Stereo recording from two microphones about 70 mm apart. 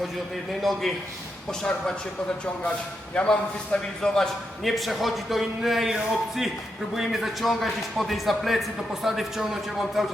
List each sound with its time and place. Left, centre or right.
0.6 s a man's voice: centre
3.2 s a man's voice: centre